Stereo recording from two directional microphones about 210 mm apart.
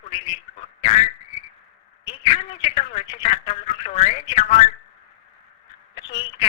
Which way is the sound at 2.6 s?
30° left (ahead or behind).